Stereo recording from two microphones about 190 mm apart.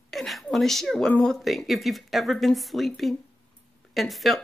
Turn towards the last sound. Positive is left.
turn(degrees=0)  # may be behind; listen again after turning